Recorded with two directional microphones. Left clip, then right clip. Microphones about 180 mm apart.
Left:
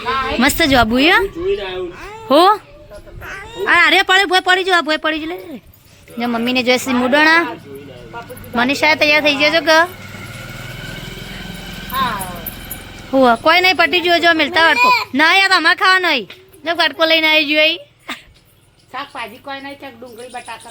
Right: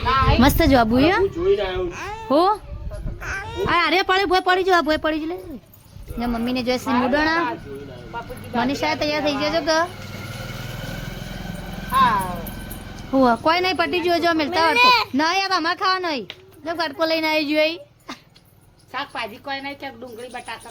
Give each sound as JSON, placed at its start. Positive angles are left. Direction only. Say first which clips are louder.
{"t": 0.3, "sound": "a child's voice", "louder": "left 7 dB", "side_deg": -10}
{"t": 3.2, "sound": "babbling", "louder": "right 1 dB", "side_deg": -10}
{"t": 3.7, "sound": "speech", "louder": "left 8 dB", "side_deg": 0}
{"t": 6.1, "sound": "a woman's voice", "louder": "left 7 dB", "side_deg": 15}
{"t": 8.5, "sound": "a woman's voice", "louder": "left 8 dB", "side_deg": 20}
{"t": 13.1, "sound": "speech", "louder": "left 6 dB", "side_deg": 0}
{"t": 14.8, "sound": "speech", "louder": "left 2 dB", "side_deg": -30}
{"t": 15.1, "sound": "a woman's voice", "louder": "left 9 dB", "side_deg": 10}
{"t": 18.9, "sound": "a woman's voice", "louder": "left 1 dB", "side_deg": 20}